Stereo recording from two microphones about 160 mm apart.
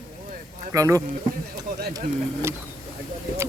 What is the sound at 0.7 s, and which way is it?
Speech, 20° right (ahead or behind).